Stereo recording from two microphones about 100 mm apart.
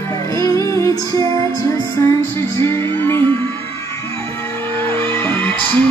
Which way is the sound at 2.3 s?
25° left (ahead or behind).